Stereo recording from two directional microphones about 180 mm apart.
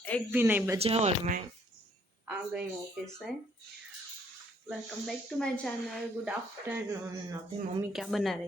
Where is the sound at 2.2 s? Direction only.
5° right (ahead or behind).